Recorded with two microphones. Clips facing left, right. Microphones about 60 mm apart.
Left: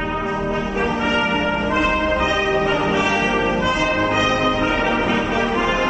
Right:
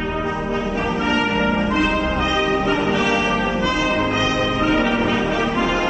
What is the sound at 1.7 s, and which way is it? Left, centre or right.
Music, centre.